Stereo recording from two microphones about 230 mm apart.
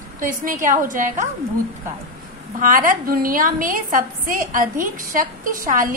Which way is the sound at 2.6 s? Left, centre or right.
Right.